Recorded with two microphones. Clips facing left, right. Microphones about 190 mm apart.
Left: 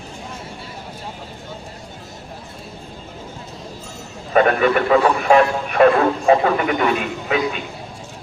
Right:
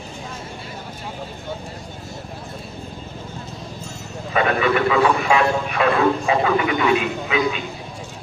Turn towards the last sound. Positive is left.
turn(degrees=45)  # may be behind; listen again after turning